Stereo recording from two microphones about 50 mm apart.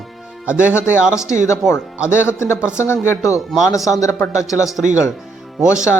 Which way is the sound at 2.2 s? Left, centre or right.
Left.